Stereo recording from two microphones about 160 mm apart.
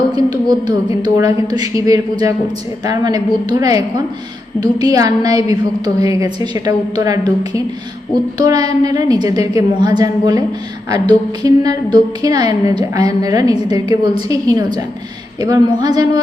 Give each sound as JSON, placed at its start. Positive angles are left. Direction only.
{"t": 0.1, "sound": "a woman's voice", "side_deg": -25}